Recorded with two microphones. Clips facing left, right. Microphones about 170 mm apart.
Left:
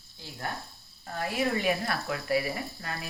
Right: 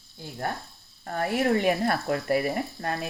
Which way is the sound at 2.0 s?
45° right (ahead or behind).